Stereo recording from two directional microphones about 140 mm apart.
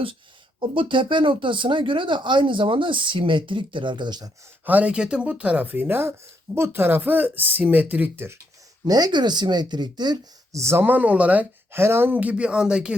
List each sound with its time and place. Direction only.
0.7 s speech: 35° right (ahead or behind)
4.6 s speech: 10° right (ahead or behind)
8.8 s speech: 30° right (ahead or behind); by 12.9 s 5° right (ahead or behind)